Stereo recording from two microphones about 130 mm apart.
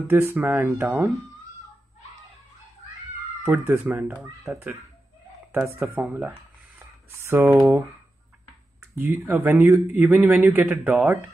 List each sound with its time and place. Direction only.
0.1 s speech: 15° right (ahead or behind)
3.4 s speech: 15° right (ahead or behind)
6.8 s a sound: 20° right (ahead or behind)
8.9 s speech: 15° right (ahead or behind)